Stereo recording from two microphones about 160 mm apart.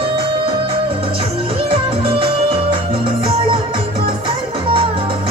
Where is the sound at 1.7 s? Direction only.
35° right (ahead or behind).